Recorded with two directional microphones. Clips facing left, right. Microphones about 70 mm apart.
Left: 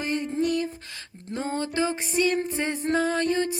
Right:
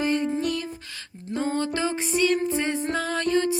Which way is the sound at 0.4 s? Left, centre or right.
Left.